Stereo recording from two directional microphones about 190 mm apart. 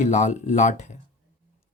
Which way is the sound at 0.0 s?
40° left (ahead or behind).